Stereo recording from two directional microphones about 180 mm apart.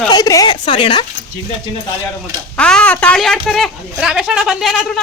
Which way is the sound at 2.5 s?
5° left (ahead or behind).